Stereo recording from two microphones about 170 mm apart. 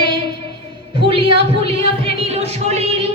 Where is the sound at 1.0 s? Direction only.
30° right (ahead or behind).